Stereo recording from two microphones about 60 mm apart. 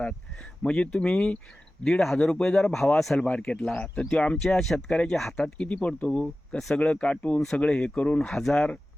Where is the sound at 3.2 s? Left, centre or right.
Centre.